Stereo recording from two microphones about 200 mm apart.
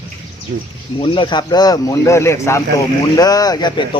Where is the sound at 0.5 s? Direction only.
50° right (ahead or behind).